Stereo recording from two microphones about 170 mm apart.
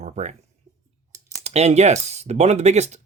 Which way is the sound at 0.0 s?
45° right (ahead or behind).